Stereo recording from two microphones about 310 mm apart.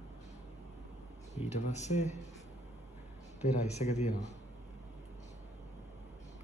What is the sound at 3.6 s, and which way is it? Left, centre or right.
Speech, left.